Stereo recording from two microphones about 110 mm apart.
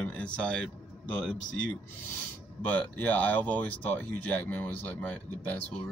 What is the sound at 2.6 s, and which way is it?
Speech, 15° left (ahead or behind).